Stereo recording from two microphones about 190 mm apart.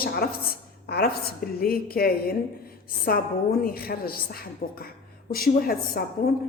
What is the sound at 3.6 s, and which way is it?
A woman's voice, 50° left (ahead or behind).